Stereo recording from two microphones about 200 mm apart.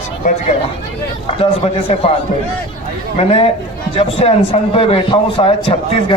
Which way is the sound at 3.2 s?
30° left (ahead or behind).